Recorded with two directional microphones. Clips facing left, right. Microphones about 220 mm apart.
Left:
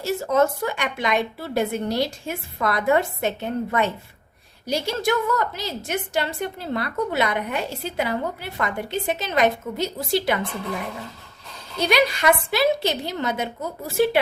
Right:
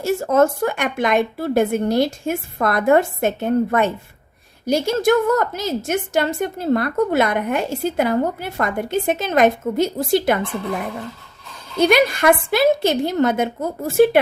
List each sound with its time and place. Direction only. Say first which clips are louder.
0.0 s a woman's voice: right 4 dB; 50° right (ahead or behind)
11.8 s a woman's voice: right 5 dB; 50° right (ahead or behind)